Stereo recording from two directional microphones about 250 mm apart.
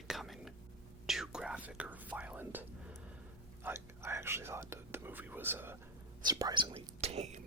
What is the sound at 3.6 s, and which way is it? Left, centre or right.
Speech, centre.